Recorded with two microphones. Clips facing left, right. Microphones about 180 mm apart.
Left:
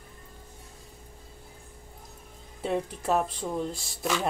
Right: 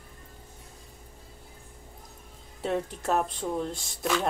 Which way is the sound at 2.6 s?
Centre (ahead or behind).